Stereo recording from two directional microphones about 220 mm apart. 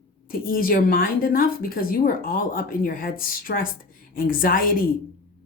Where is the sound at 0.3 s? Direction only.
40° left (ahead or behind).